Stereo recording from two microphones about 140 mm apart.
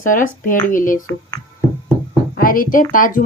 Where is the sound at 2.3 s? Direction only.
85° left.